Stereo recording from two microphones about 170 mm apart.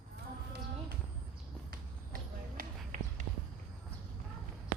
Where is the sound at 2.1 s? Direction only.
55° right (ahead or behind).